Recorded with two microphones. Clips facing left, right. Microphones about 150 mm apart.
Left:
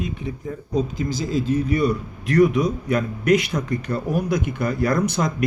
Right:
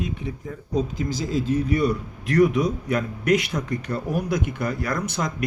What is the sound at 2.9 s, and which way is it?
A man's voice, 30° left (ahead or behind).